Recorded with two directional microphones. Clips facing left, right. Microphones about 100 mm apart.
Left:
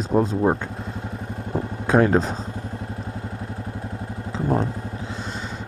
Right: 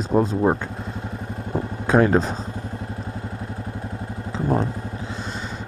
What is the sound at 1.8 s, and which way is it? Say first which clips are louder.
Speech: even; 25° right (ahead or behind).